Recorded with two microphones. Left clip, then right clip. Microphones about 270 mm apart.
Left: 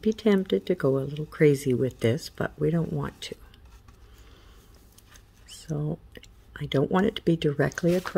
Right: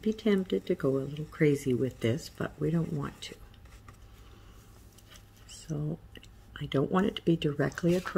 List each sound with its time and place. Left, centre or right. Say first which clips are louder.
0.0 s speech: left 5 dB; left
5.7 s speech: left 5 dB; left